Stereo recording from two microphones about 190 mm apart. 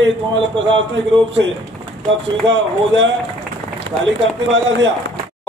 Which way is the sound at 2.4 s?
75° right (ahead or behind).